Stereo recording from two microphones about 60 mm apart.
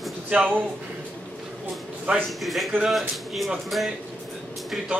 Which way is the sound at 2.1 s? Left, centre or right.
Right.